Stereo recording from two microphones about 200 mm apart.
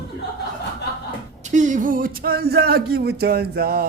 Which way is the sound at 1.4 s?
40° right (ahead or behind).